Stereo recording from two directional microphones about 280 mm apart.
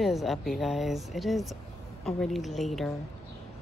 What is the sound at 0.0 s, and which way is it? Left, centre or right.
Speech, centre.